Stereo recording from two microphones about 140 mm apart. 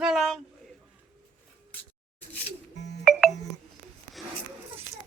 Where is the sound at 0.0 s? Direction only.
Centre (ahead or behind).